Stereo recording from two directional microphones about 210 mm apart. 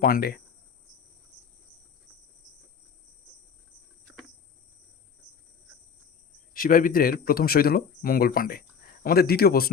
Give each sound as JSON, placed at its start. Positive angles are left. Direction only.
{"t": 0.0, "sound": "speech", "side_deg": 45}
{"t": 6.5, "sound": "speech", "side_deg": 45}